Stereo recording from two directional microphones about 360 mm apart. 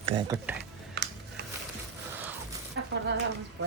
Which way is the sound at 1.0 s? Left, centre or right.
Right.